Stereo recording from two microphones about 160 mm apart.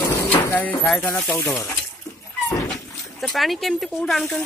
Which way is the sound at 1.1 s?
10° left (ahead or behind).